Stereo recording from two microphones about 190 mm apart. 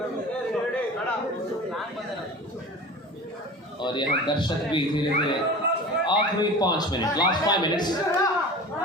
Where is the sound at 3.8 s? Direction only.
25° left (ahead or behind).